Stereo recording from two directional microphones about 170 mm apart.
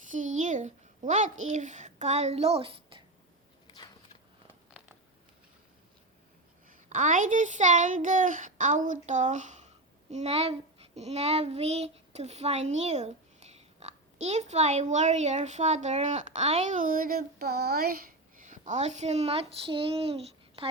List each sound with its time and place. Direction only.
0.1 s a child's voice: 45° right (ahead or behind)
6.7 s speech: 50° right (ahead or behind)
18.4 s speech: 45° right (ahead or behind)